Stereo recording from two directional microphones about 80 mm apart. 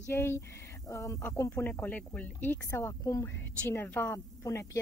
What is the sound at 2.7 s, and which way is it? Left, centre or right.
Speech, left.